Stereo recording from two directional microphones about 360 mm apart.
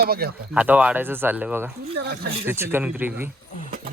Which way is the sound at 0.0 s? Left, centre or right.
Right.